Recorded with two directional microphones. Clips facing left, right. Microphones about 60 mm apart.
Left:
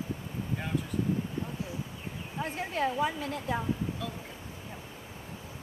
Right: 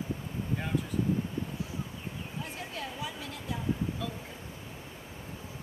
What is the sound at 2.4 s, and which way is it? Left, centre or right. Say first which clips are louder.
Speech: left 13 dB; left.